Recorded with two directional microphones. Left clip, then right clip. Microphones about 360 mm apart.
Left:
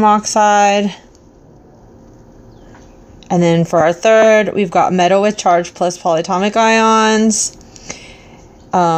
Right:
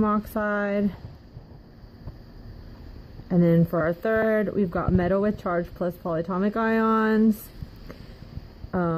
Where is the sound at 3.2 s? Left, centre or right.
Left.